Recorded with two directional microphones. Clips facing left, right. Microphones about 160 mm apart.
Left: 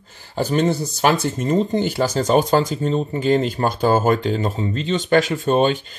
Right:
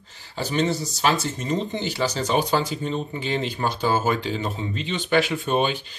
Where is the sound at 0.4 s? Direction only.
50° left (ahead or behind).